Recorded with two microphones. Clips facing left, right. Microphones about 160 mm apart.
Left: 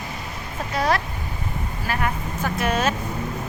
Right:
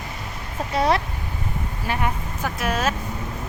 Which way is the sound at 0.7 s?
25° right (ahead or behind).